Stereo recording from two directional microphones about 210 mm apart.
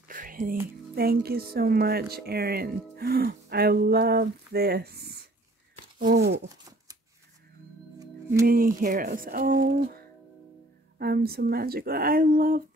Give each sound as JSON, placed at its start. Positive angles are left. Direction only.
{"t": 0.1, "sound": "a sound", "side_deg": -40}
{"t": 0.9, "sound": "speech", "side_deg": -45}
{"t": 8.0, "sound": "music", "side_deg": -15}
{"t": 8.5, "sound": "speech", "side_deg": -40}